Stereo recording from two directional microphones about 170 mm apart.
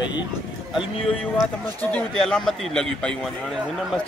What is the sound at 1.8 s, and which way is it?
A man's voice, 10° left (ahead or behind).